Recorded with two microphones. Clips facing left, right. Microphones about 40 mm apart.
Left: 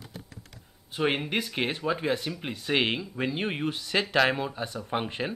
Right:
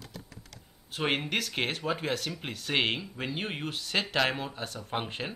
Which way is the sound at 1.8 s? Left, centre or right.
Centre.